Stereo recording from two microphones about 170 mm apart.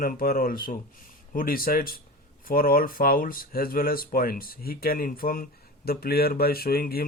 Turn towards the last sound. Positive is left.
turn(degrees=65)  # may be behind; listen again after turning